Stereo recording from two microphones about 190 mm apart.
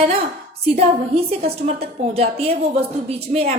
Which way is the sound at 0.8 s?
35° right (ahead or behind).